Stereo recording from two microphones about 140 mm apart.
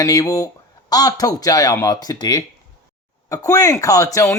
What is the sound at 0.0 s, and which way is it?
Speech, 25° left (ahead or behind).